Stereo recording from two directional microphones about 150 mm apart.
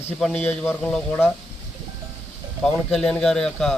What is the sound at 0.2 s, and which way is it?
Speech, centre (ahead or behind).